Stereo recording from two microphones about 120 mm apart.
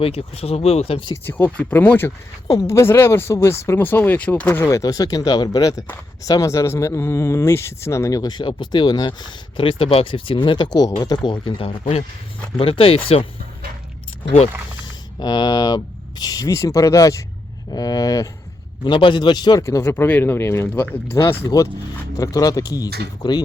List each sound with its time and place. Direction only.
0.0 s speech: 55° left (ahead or behind)
1.1 s speech: 15° left (ahead or behind); by 13.2 s 55° left (ahead or behind)
15.2 s speech: 35° left (ahead or behind)
18.9 s speech: 40° left (ahead or behind)
19.6 s speech: 25° left (ahead or behind)